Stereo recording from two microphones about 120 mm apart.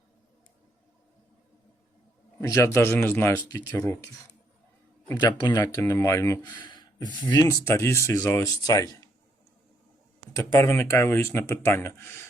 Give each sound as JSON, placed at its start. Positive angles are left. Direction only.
{"t": 2.4, "sound": "speech", "side_deg": 20}
{"t": 5.1, "sound": "speech", "side_deg": 35}
{"t": 7.6, "sound": "speech", "side_deg": 20}
{"t": 10.3, "sound": "speech", "side_deg": 20}